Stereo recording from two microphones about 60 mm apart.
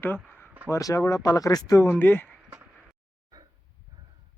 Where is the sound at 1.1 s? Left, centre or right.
Left.